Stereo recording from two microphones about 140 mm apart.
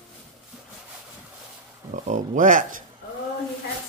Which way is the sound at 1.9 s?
65° right (ahead or behind).